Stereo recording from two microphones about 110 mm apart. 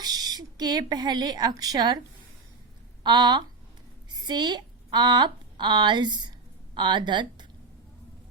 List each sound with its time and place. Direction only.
0.0 s speech: 40° right (ahead or behind)
3.0 s a woman's voice: 45° right (ahead or behind)